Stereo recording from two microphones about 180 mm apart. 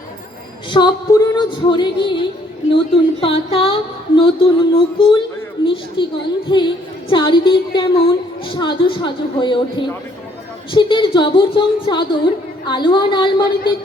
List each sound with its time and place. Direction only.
0.7 s speech: 25° left (ahead or behind)
2.7 s a sound: 30° left (ahead or behind)
5.6 s speech: 30° left (ahead or behind)
10.7 s speech: 25° left (ahead or behind)